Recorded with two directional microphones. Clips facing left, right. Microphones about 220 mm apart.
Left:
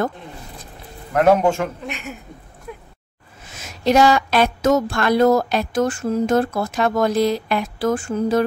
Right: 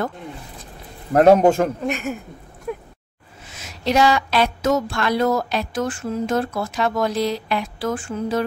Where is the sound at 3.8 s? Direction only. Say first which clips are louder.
Left 3 dB; 45° left (ahead or behind).